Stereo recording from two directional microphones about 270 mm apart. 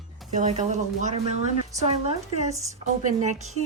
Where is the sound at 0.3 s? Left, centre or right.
Right.